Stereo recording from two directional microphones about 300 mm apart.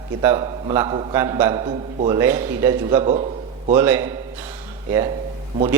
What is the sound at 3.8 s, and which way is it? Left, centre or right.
Speech, centre.